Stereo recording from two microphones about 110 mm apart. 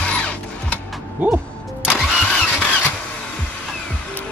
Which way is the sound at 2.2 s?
10° left (ahead or behind).